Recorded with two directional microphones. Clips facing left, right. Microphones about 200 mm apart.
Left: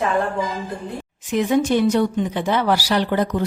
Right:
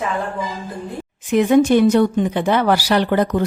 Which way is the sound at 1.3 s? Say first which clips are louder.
Right 5 dB; 55° right (ahead or behind).